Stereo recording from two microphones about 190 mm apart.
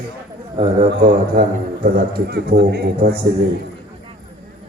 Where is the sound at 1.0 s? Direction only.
55° right (ahead or behind).